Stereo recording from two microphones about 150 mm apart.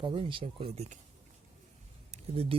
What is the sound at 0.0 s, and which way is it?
Speech, 35° right (ahead or behind).